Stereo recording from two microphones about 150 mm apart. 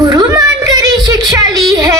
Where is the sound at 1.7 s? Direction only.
20° right (ahead or behind).